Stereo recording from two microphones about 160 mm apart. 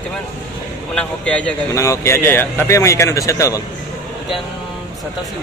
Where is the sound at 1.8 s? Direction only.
15° left (ahead or behind).